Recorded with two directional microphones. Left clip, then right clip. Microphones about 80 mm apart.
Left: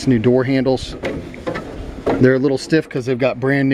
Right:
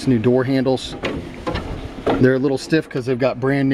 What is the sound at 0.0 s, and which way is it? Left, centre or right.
Speech, centre.